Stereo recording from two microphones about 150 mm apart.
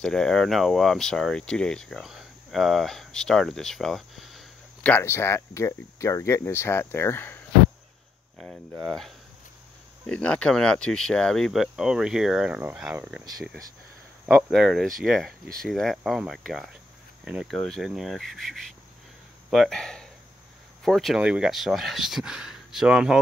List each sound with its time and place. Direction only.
0.0 s speech: 5° left (ahead or behind)
4.9 s speech: 15° left (ahead or behind)
8.4 s speech: centre (ahead or behind)
14.2 s speech: centre (ahead or behind)